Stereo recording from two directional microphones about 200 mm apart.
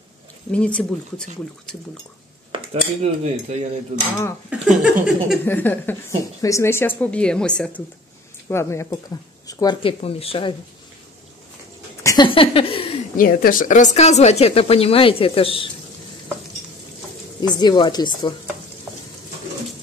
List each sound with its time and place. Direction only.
0.5 s speech: 5° left (ahead or behind)
2.7 s cutlery: 35° right (ahead or behind)
4.5 s speech: 5° right (ahead or behind)
5.4 s speech: 10° left (ahead or behind); by 10.5 s 30° left (ahead or behind)
12.0 s speech: 20° left (ahead or behind)
13.1 s a woman's voice: 45° left (ahead or behind); by 15.7 s 25° left (ahead or behind)
17.4 s speech: 20° left (ahead or behind)